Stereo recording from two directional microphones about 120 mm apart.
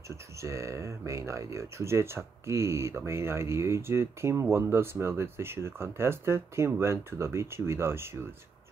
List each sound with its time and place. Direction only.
0.1 s speech: 25° right (ahead or behind)